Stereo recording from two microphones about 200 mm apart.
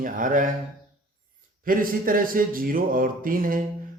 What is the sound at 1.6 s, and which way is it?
Speech, 45° right (ahead or behind).